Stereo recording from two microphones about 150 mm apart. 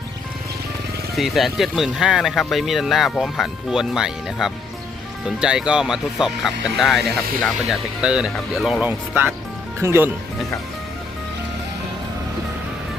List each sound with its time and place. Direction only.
1.1 s speech: centre (ahead or behind)
8.9 s speech: 15° right (ahead or behind)